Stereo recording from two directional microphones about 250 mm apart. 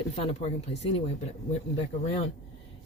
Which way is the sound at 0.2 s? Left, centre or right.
Left.